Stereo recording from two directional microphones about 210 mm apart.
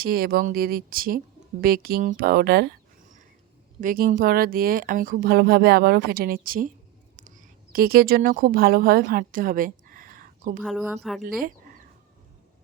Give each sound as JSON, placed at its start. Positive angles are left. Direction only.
{"t": 0.0, "sound": "speech", "side_deg": -45}
{"t": 3.8, "sound": "a woman's voice", "side_deg": -40}
{"t": 10.6, "sound": "a woman's voice", "side_deg": 0}
{"t": 11.3, "sound": "a sound", "side_deg": -40}